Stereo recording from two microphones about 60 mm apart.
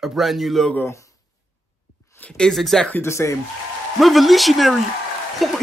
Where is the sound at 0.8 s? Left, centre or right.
Left.